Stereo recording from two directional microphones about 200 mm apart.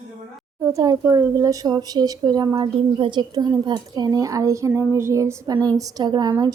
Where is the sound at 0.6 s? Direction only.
15° right (ahead or behind).